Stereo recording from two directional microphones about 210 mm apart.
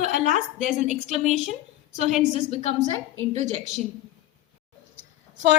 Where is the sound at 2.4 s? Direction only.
35° left (ahead or behind).